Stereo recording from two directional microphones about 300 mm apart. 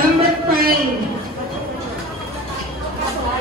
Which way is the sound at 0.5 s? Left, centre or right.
Right.